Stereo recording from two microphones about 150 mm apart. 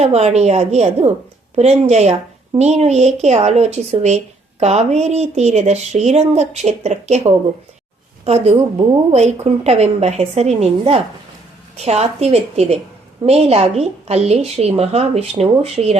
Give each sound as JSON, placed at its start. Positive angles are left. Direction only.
{"t": 0.0, "sound": "speech", "side_deg": -45}